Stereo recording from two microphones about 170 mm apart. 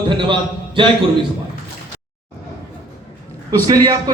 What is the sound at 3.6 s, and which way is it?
Speech, 25° right (ahead or behind).